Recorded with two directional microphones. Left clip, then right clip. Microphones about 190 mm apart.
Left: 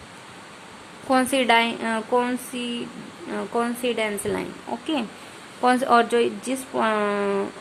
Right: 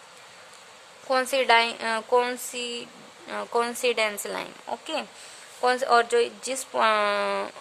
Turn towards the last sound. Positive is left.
turn(degrees=-25)  # may be behind; listen again after turning